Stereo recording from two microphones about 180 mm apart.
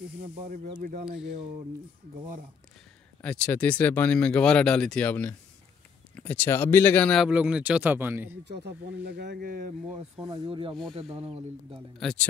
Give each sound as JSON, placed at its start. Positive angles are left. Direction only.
{"t": 0.7, "sound": "speech", "side_deg": -45}
{"t": 3.2, "sound": "speech", "side_deg": 5}
{"t": 7.2, "sound": "speech", "side_deg": -5}
{"t": 8.5, "sound": "speech", "side_deg": -70}
{"t": 10.2, "sound": "speech", "side_deg": -25}
{"t": 12.0, "sound": "speech", "side_deg": 5}